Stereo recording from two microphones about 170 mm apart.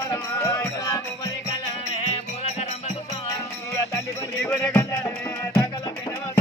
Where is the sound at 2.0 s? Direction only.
40° left (ahead or behind).